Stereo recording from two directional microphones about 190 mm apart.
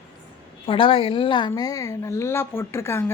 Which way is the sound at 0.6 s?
25° left (ahead or behind).